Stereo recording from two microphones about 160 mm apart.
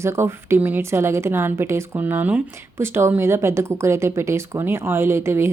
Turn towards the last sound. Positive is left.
turn(degrees=-15)  # may be behind; listen again after turning